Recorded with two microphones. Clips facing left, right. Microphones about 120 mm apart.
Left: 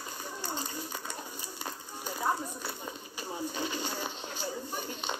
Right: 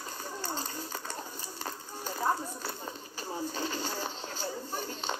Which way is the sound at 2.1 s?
35° right (ahead or behind).